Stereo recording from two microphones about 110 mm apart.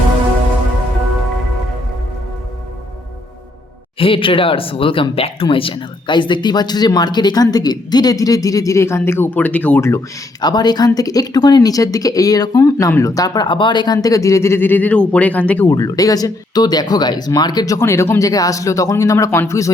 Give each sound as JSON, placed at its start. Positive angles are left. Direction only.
{"t": 3.9, "sound": "speech", "side_deg": 55}
{"t": 10.4, "sound": "speech", "side_deg": 40}
{"t": 15.7, "sound": "speech", "side_deg": 35}